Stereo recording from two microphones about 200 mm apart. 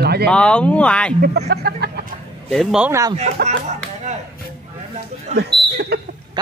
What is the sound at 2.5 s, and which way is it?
Speech, centre (ahead or behind).